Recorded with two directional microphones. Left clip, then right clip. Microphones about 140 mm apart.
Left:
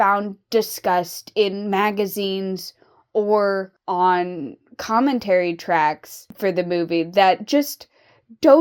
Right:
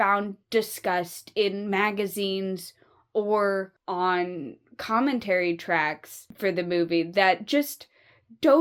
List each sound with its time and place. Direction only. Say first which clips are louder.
0.0 s a woman's voice: left 5 dB; 40° left (ahead or behind)